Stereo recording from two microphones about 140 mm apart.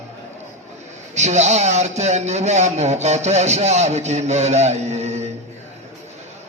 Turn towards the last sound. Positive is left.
turn(degrees=-50)  # may be behind; listen again after turning